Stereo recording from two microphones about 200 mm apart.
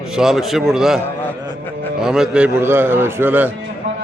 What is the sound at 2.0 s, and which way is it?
A man's voice, centre (ahead or behind).